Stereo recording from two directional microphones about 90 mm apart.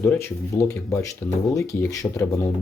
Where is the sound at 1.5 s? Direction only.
35° left (ahead or behind).